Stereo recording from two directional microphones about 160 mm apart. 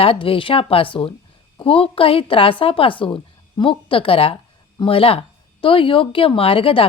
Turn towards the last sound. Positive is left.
turn(degrees=35)  # may be behind; listen again after turning